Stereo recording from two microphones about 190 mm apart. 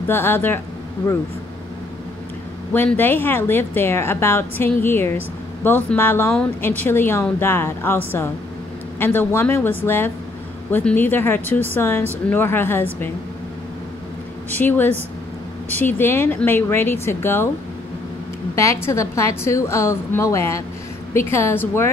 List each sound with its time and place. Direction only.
0.0 s a woman's voice: 10° left (ahead or behind)
2.7 s a woman's voice: 10° left (ahead or behind)
9.0 s a woman's voice: 10° left (ahead or behind)
14.5 s a woman's voice: 10° left (ahead or behind)
18.5 s a woman's voice: 15° left (ahead or behind)